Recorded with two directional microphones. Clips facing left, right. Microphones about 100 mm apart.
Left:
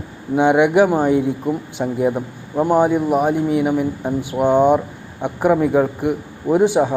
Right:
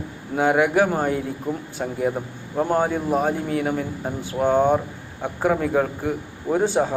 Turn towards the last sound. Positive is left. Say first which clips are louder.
# left 5 dB
turn(degrees=15)  # may be behind; listen again after turning